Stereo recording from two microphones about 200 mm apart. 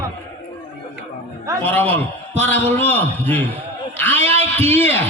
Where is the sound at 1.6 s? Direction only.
10° left (ahead or behind).